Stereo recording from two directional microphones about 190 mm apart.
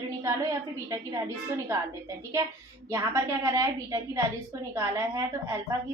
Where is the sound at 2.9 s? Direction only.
15° right (ahead or behind).